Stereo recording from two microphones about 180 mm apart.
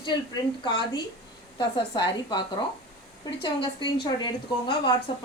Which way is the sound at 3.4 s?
25° left (ahead or behind).